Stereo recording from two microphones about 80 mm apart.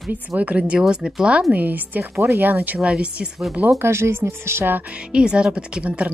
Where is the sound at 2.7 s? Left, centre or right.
Centre.